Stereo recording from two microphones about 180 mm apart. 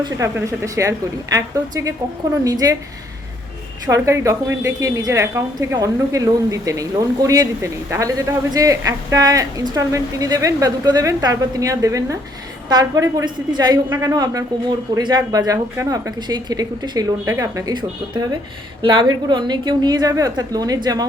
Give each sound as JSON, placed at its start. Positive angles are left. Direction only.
{"t": 0.0, "sound": "a woman's voice", "side_deg": -15}
{"t": 3.8, "sound": "a woman's voice", "side_deg": -15}